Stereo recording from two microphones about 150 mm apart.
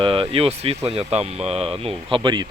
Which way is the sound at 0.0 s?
35° right (ahead or behind).